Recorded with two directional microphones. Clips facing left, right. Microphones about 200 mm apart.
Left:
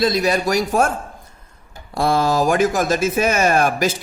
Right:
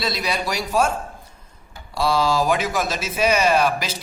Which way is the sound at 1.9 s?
50° left (ahead or behind).